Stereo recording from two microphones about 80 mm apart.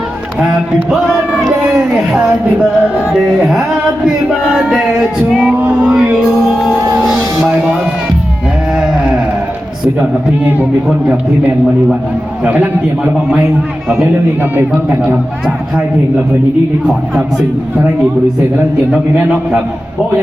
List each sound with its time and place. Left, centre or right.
1.5 s speech: centre
3.3 s music: centre
4.4 s speech: centre
5.5 s speech: centre
6.2 s music: centre
7.4 s speech: centre
8.8 s a sound: centre
13.8 s music: centre
14.5 s speech: right